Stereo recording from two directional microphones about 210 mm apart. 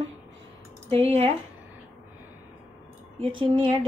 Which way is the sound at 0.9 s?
30° right (ahead or behind).